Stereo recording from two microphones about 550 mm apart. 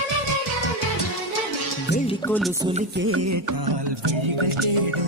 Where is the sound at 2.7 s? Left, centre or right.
Right.